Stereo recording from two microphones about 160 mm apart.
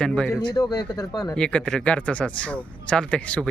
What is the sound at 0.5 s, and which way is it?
Speech, 25° left (ahead or behind).